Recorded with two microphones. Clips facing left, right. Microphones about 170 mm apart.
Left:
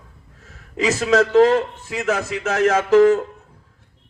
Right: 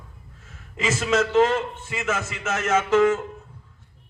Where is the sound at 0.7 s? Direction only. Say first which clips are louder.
Left 5 dB; 35° left (ahead or behind).